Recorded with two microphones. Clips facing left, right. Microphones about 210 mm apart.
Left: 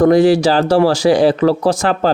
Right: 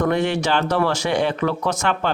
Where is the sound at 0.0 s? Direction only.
35° left (ahead or behind).